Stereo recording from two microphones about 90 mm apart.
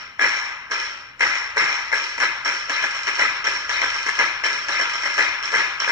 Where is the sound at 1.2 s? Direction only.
40° right (ahead or behind).